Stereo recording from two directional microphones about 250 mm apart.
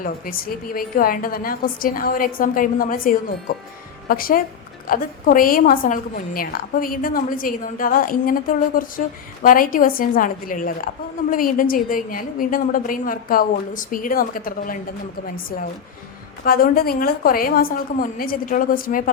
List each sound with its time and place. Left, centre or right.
0.0 s a woman's voice: left
16.4 s a woman's voice: left